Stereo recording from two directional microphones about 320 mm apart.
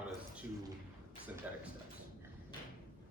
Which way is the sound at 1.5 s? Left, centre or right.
Centre.